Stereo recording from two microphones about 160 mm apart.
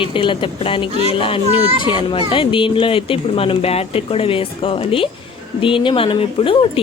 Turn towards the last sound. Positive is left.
turn(degrees=35)  # may be behind; listen again after turning